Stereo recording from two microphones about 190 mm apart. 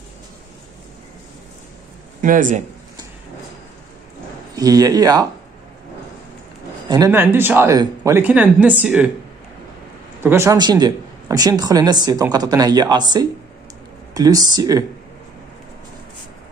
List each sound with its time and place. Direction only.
2.2 s speech: 45° right (ahead or behind)
4.6 s a man's voice: 20° right (ahead or behind)
7.1 s speech: 10° right (ahead or behind)
10.2 s a man's voice: 15° right (ahead or behind)